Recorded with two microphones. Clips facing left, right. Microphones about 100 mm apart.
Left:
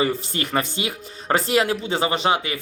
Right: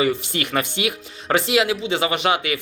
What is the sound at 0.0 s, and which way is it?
Speech, 35° left (ahead or behind).